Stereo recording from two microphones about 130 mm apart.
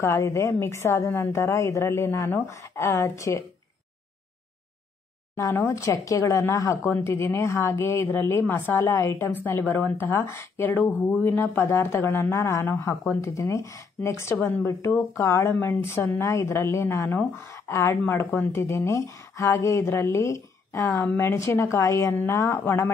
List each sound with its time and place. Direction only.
0.0 s speech: 20° left (ahead or behind)
5.3 s speech: 20° left (ahead or behind)